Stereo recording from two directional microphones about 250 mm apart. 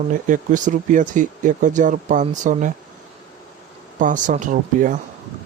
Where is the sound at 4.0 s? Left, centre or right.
Right.